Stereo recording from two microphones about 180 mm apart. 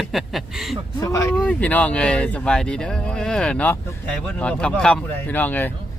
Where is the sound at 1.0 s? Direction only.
20° left (ahead or behind).